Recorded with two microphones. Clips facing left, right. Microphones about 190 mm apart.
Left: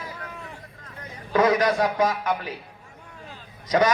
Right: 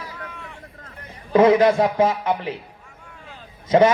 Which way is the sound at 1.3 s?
25° right (ahead or behind).